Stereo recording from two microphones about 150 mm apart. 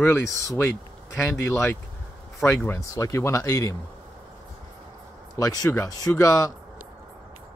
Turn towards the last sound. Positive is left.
turn(degrees=25)  # may be behind; listen again after turning